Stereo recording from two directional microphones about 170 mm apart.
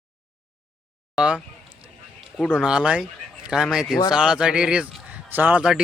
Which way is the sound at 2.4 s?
Centre (ahead or behind).